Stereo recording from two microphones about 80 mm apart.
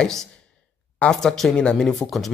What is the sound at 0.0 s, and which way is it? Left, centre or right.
Speech, centre.